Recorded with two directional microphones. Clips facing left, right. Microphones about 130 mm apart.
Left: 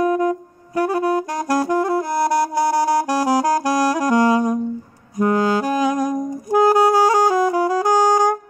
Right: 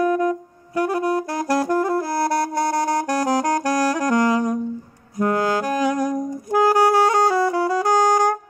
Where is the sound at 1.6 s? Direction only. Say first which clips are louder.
Left 1 dB; centre (ahead or behind).